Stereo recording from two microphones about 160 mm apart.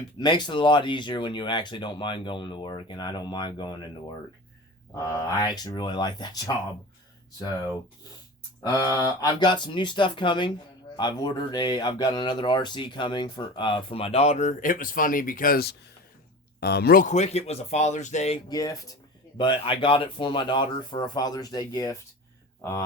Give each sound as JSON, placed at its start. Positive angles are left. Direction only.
{"t": 0.2, "sound": "speech", "side_deg": 25}
{"t": 5.3, "sound": "speech", "side_deg": 25}
{"t": 16.6, "sound": "speech", "side_deg": 85}
{"t": 18.4, "sound": "speech", "side_deg": 20}